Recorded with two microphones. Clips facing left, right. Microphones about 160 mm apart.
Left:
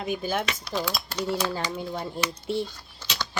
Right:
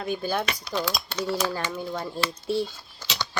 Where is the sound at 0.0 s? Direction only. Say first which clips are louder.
Right 1 dB; 15° left (ahead or behind).